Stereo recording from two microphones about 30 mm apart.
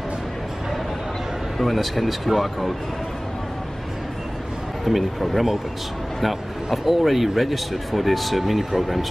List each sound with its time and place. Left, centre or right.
1.6 s speech: centre
4.8 s speech: centre